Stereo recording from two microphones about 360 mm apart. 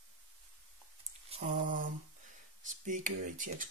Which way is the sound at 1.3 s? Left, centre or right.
Right.